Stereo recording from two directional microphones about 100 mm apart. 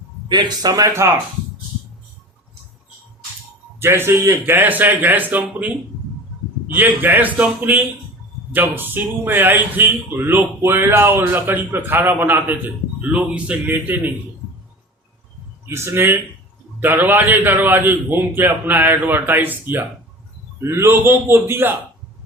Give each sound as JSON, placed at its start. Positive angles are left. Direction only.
{"t": 0.3, "sound": "speech", "side_deg": -45}
{"t": 3.8, "sound": "a man's voice", "side_deg": -25}
{"t": 6.7, "sound": "a man's voice", "side_deg": -20}
{"t": 15.6, "sound": "a man's voice", "side_deg": -25}